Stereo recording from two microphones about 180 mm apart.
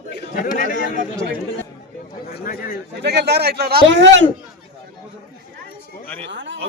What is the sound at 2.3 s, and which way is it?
Speech, 55° left (ahead or behind).